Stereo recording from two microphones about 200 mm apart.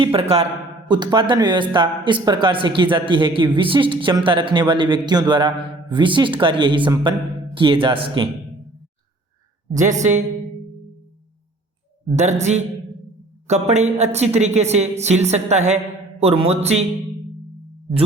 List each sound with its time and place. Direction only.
0.0 s speech: 30° right (ahead or behind)
9.7 s a woman's voice: 40° right (ahead or behind)
12.1 s a woman's voice: 35° right (ahead or behind)
13.5 s a woman's voice: 35° right (ahead or behind)